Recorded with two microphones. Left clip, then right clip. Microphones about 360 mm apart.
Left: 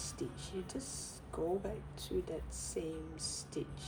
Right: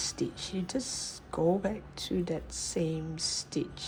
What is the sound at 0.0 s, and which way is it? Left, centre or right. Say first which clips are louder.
Speech: right 10 dB; right.